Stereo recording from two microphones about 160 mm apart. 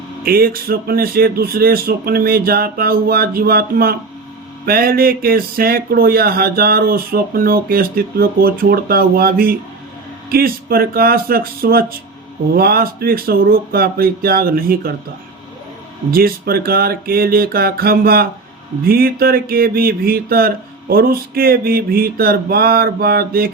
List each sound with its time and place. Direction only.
0.3 s speech: 70° right (ahead or behind)
16.1 s speech: 70° right (ahead or behind)